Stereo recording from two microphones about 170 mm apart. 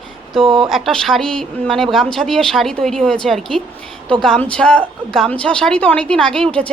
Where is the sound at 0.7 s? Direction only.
Centre (ahead or behind).